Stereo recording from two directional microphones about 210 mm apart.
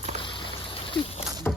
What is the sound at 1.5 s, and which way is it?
Music, 10° left (ahead or behind).